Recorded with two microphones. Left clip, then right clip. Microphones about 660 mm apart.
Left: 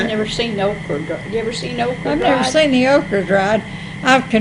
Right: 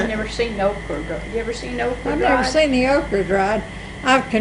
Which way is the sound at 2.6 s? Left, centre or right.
Left.